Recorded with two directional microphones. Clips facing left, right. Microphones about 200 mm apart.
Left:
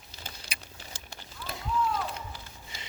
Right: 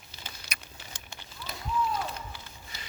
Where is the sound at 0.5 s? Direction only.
30° left (ahead or behind).